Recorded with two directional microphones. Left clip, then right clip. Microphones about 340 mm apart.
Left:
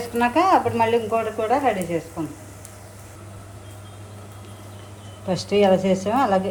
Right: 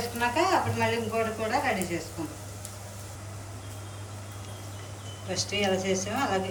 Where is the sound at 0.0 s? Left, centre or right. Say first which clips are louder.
Left 7 dB; centre.